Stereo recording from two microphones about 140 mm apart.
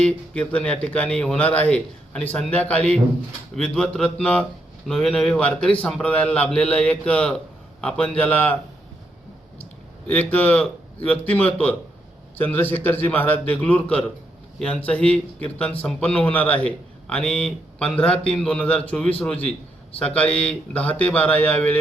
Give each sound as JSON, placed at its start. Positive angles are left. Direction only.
{"t": 0.0, "sound": "a man's voice", "side_deg": 10}
{"t": 10.1, "sound": "a man's voice", "side_deg": 10}